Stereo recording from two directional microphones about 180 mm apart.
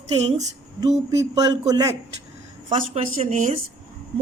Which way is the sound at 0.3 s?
20° right (ahead or behind).